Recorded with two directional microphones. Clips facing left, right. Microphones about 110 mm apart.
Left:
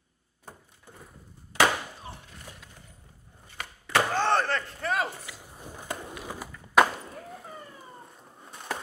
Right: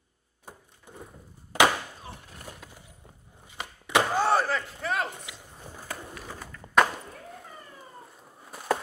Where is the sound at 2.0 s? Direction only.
Centre (ahead or behind).